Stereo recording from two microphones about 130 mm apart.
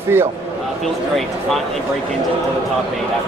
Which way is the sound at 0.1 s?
20° right (ahead or behind).